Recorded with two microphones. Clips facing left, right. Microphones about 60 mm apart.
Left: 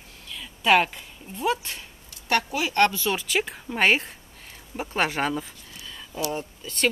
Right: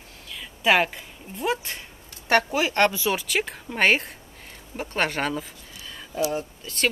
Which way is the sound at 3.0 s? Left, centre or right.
Centre.